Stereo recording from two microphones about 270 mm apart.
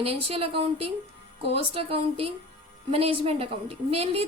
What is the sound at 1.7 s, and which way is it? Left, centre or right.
A woman's voice, right.